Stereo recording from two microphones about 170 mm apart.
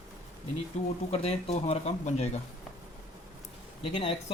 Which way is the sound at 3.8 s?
30° left (ahead or behind).